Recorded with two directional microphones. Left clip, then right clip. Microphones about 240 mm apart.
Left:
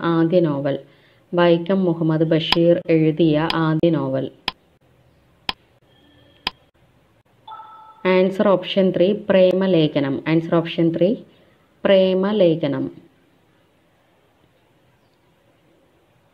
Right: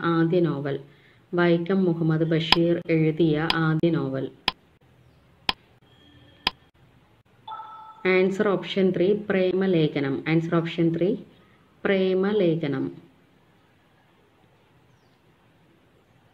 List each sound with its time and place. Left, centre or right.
0.0 s a woman's voice: centre
5.5 s a sound: centre
6.5 s tick: centre
7.4 s glockenspiel: centre
8.0 s a woman's voice: left